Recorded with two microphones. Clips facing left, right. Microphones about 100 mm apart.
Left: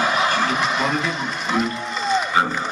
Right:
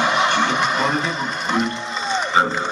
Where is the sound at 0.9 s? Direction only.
35° right (ahead or behind).